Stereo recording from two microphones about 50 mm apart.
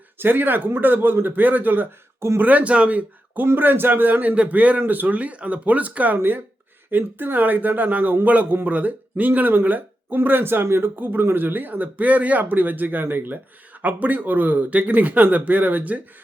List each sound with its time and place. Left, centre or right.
0.2 s speech: right
3.4 s speech: right
9.6 s a sound: right
10.2 s speech: right
10.9 s speech: right